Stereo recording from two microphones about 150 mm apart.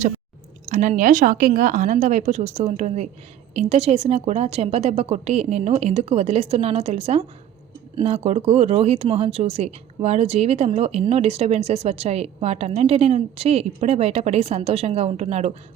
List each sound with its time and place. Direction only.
0.7 s a woman's voice: 55° right (ahead or behind)